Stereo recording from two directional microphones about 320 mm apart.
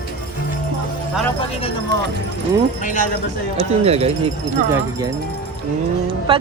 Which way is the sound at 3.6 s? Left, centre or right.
Centre.